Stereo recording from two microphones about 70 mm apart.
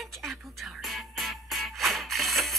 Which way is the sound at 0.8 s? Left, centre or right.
Centre.